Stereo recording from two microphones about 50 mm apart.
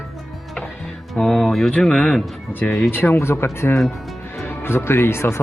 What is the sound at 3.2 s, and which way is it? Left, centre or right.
Speech, left.